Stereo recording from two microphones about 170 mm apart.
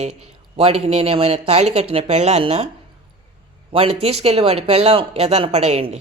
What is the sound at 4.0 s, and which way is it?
Speech, 35° right (ahead or behind).